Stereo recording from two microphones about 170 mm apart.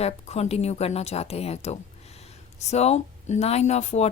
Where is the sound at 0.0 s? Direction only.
40° left (ahead or behind).